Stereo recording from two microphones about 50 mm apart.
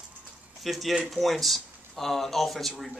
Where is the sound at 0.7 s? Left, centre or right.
Centre.